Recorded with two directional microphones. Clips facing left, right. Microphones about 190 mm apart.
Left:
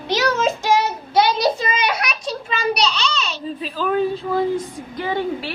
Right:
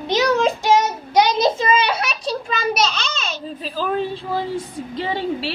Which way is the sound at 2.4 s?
45° right (ahead or behind).